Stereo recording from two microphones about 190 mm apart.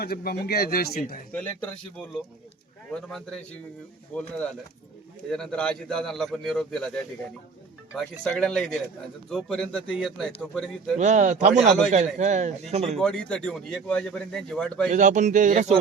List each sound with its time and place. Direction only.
0.0 s speech: 55° left (ahead or behind)
1.3 s speech: 10° left (ahead or behind)
7.9 s speech: 5° left (ahead or behind)
10.9 s speech: 40° right (ahead or behind)
13.0 s speech: 5° left (ahead or behind)
14.9 s speech: 40° right (ahead or behind)